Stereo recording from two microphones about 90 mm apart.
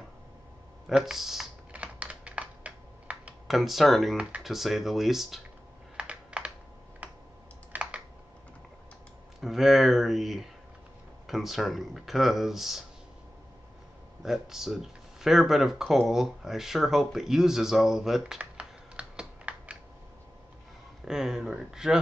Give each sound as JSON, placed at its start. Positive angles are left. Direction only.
{"t": 0.8, "sound": "speech", "side_deg": -5}
{"t": 1.7, "sound": "typing", "side_deg": -15}
{"t": 3.4, "sound": "speech", "side_deg": 0}
{"t": 5.9, "sound": "typing", "side_deg": -10}
{"t": 7.7, "sound": "computer keyboard", "side_deg": -15}
{"t": 9.4, "sound": "speech", "side_deg": -5}
{"t": 14.2, "sound": "speech", "side_deg": -5}
{"t": 18.4, "sound": "typing", "side_deg": -10}
{"t": 21.0, "sound": "speech", "side_deg": -5}